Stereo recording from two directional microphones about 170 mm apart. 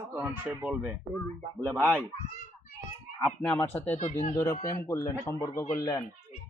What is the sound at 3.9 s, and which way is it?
Speech, 40° left (ahead or behind).